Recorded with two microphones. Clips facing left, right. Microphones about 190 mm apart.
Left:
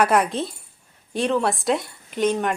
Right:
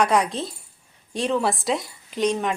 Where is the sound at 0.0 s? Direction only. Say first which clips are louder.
Left 1 dB; 5° left (ahead or behind).